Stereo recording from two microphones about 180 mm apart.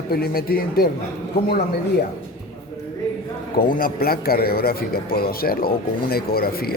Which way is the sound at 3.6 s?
55° left (ahead or behind).